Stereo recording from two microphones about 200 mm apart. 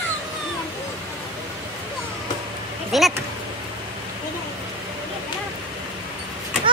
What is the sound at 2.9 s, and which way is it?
Speech, centre (ahead or behind).